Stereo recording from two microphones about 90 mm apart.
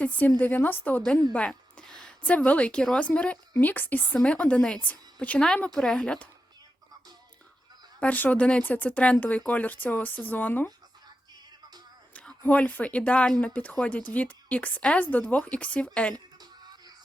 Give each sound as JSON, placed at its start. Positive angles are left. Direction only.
{"t": 0.0, "sound": "speech", "side_deg": 20}
{"t": 1.3, "sound": "a sound", "side_deg": 15}
{"t": 2.2, "sound": "speech", "side_deg": 15}
{"t": 7.9, "sound": "speech", "side_deg": 20}
{"t": 12.1, "sound": "speech", "side_deg": 15}
{"t": 16.1, "sound": "music", "side_deg": -50}